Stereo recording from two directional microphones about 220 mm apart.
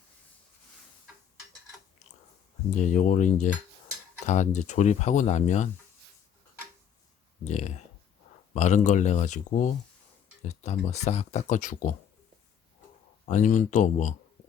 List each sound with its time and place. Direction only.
2.7 s speech: 35° left (ahead or behind)
7.4 s speech: 30° left (ahead or behind)
13.2 s speech: 35° left (ahead or behind)